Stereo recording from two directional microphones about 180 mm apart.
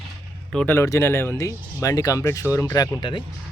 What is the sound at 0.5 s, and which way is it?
Speech, 10° left (ahead or behind).